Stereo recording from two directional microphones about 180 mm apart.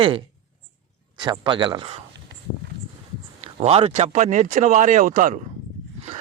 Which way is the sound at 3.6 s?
35° right (ahead or behind).